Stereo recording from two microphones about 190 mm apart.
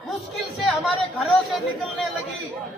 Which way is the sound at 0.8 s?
Centre (ahead or behind).